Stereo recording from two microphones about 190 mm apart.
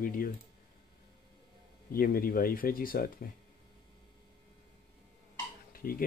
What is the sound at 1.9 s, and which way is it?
Speech, 50° left (ahead or behind).